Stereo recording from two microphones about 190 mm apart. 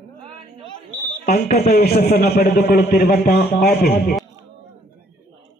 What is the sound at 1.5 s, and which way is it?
A man's voice, 55° left (ahead or behind).